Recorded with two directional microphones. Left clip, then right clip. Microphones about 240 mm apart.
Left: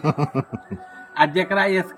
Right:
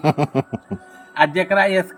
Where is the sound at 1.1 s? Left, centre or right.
Centre.